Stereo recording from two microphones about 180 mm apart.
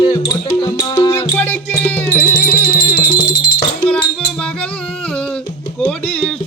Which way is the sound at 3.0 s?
25° left (ahead or behind).